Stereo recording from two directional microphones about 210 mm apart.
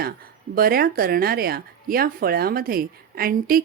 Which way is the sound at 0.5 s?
45° right (ahead or behind).